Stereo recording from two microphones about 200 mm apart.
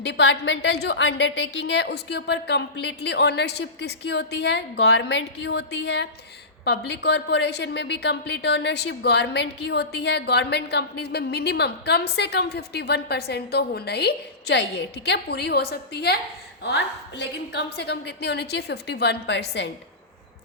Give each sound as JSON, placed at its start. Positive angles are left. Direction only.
{"t": 0.0, "sound": "a woman's voice", "side_deg": 60}